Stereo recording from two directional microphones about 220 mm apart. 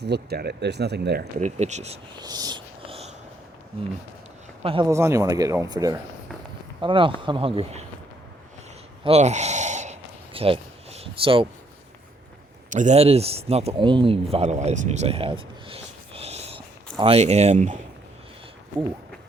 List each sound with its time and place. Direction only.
0.0 s speech: 50° right (ahead or behind)
1.4 s speech: 30° right (ahead or behind)
2.2 s a sound: 20° right (ahead or behind)
4.6 s speech: 25° right (ahead or behind)
9.0 s a sound: 30° right (ahead or behind)
12.7 s speech: 30° right (ahead or behind)